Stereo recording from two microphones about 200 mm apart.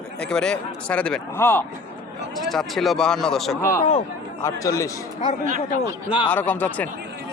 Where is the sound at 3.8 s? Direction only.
35° left (ahead or behind).